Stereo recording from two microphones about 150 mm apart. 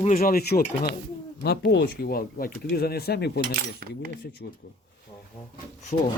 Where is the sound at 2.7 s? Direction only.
90° left.